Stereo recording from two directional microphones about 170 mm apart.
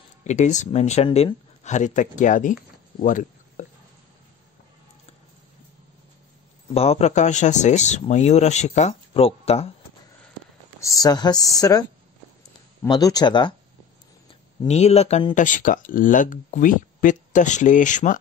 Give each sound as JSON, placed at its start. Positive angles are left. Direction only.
{"t": 0.2, "sound": "speech", "side_deg": 45}
{"t": 6.7, "sound": "speech", "side_deg": 35}
{"t": 10.8, "sound": "speech", "side_deg": 20}
{"t": 12.8, "sound": "speech", "side_deg": 25}
{"t": 14.7, "sound": "speech", "side_deg": 40}